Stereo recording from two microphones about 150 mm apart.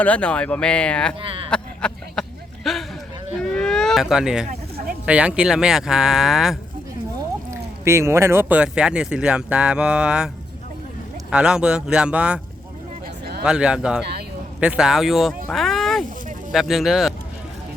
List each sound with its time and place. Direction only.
0.0 s speech: 10° left (ahead or behind)
1.2 s speech: 35° right (ahead or behind)
1.5 s a sound: 5° left (ahead or behind)
5.0 s speech: 10° right (ahead or behind)
7.5 s speech: 20° right (ahead or behind)
13.4 s speech: 5° right (ahead or behind)
15.4 s a sound: centre (ahead or behind)
16.5 s speech: centre (ahead or behind)